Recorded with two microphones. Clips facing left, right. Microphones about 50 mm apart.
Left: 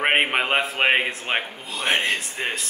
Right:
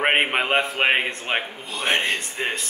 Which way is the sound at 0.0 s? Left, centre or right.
Centre.